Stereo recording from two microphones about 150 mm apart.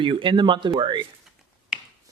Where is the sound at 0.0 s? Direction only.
35° right (ahead or behind).